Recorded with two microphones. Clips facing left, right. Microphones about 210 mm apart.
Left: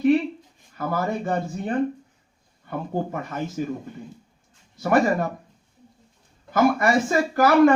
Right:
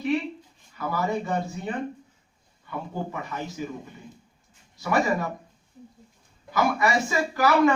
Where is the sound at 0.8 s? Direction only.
50° left (ahead or behind).